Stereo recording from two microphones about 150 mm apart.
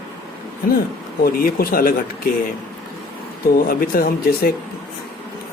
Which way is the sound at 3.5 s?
70° left (ahead or behind).